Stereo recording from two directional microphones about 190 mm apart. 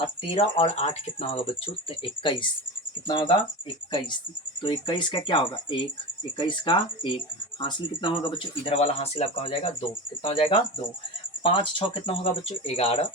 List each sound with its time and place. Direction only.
0.2 s speech: 30° left (ahead or behind)
4.6 s speech: 25° left (ahead or behind)